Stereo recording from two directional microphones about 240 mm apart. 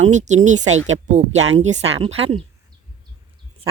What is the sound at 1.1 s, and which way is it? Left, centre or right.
Speech, right.